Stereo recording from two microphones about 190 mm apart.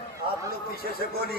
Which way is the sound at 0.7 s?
55° left (ahead or behind).